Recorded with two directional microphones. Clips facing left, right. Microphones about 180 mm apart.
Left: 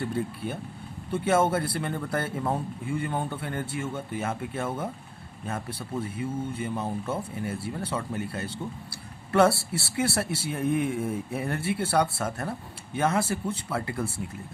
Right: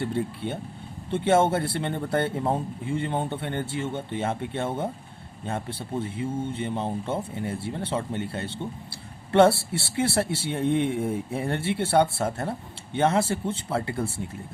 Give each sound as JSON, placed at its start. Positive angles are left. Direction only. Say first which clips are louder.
{"t": 0.0, "sound": "speech", "louder": "right 2 dB", "side_deg": -25}